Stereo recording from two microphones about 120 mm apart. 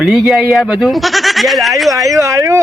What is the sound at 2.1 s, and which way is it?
Speech, 25° right (ahead or behind).